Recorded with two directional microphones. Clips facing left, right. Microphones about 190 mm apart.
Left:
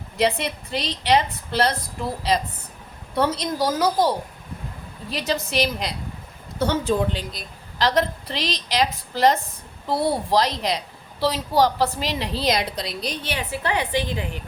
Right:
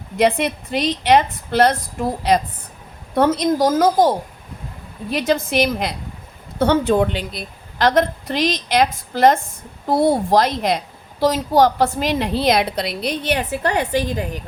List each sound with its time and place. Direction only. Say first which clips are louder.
0.2 s a woman's voice: right 5 dB; 55° right (ahead or behind)
5.1 s a woman's voice: right 6 dB; 55° right (ahead or behind)